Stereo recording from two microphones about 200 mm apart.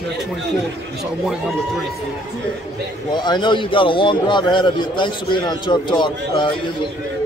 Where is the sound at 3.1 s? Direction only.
20° left (ahead or behind).